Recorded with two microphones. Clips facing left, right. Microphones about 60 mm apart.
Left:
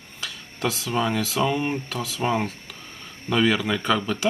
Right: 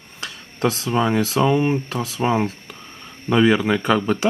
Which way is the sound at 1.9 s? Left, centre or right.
Right.